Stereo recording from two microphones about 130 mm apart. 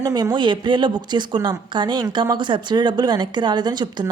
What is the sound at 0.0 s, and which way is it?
Speech, 30° right (ahead or behind).